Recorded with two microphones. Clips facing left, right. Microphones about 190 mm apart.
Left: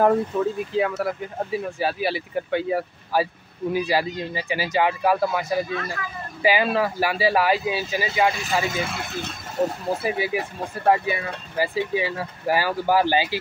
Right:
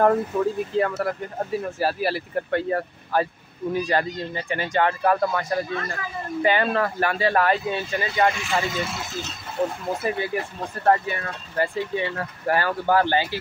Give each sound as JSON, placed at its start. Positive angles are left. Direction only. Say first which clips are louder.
{"t": 0.0, "sound": "speech", "louder": "even", "side_deg": 0}
{"t": 8.8, "sound": "speech", "louder": "left 1 dB", "side_deg": 60}
{"t": 10.0, "sound": "speech", "louder": "right 1 dB", "side_deg": 10}